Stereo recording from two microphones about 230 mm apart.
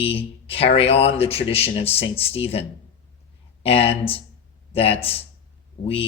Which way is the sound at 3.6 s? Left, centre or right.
Left.